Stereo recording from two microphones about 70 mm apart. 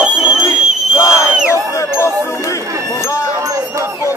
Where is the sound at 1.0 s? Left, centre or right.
Left.